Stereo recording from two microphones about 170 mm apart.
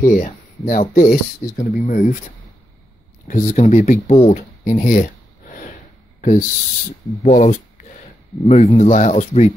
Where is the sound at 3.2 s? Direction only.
45° left (ahead or behind).